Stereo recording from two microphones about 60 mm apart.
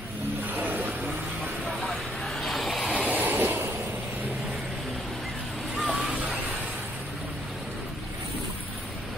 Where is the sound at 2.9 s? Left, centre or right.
Right.